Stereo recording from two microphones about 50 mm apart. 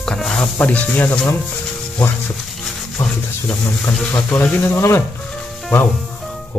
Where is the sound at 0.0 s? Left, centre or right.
Centre.